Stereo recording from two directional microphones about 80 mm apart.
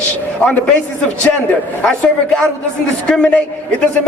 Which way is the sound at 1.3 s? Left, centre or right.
Centre.